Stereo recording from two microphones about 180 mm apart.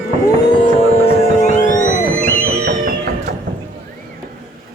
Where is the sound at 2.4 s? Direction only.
55° right (ahead or behind).